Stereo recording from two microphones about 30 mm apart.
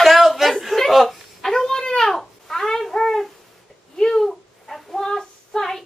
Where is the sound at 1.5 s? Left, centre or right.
Centre.